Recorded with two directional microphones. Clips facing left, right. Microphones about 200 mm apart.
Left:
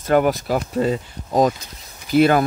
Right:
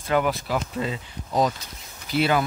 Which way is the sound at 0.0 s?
45° left (ahead or behind).